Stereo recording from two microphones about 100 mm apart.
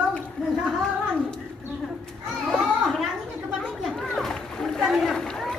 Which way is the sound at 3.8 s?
5° left (ahead or behind).